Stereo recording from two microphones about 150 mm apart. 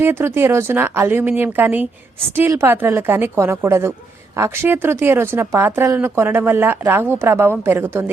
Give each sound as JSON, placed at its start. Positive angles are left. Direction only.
{"t": 0.0, "sound": "speech", "side_deg": -15}